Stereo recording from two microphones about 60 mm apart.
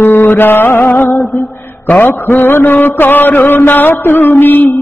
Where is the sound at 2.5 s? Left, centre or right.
Left.